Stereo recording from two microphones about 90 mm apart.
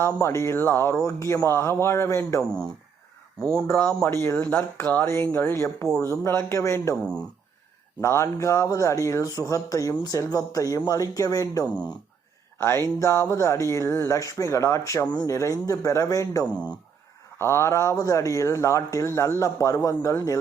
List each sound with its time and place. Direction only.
0.0 s speech: 30° left (ahead or behind)
3.4 s speech: 5° left (ahead or behind)
3.8 s speech: 25° left (ahead or behind)
6.9 s speech: 10° left (ahead or behind)
8.0 s speech: 30° left (ahead or behind)
12.5 s speech: 25° left (ahead or behind)
17.3 s speech: 30° left (ahead or behind)